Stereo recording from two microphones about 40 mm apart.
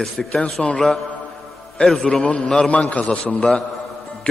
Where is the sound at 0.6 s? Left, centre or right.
Left.